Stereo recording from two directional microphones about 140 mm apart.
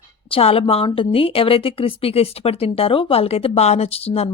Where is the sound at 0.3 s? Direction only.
40° left (ahead or behind).